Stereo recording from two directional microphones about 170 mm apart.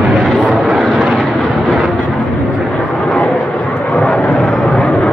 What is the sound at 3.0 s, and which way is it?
Vehicle, 5° left (ahead or behind).